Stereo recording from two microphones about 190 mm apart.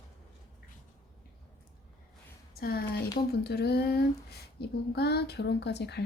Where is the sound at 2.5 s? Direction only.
55° left (ahead or behind).